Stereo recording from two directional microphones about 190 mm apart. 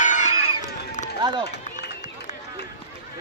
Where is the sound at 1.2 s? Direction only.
25° right (ahead or behind).